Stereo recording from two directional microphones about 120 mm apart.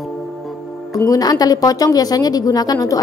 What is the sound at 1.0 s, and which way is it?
Speech, 30° left (ahead or behind).